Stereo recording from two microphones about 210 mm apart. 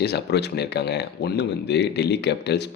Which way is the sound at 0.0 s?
50° left (ahead or behind).